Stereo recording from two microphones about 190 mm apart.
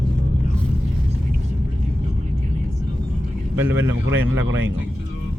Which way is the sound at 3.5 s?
10° right (ahead or behind).